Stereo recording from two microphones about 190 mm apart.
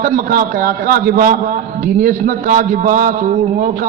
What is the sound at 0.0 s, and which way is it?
A man's voice, 50° right (ahead or behind).